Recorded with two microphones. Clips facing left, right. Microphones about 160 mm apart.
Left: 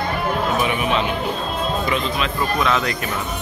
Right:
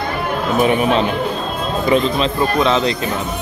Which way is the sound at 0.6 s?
40° right (ahead or behind).